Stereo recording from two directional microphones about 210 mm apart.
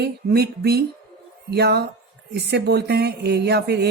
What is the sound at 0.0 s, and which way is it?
A woman's voice, 50° right (ahead or behind).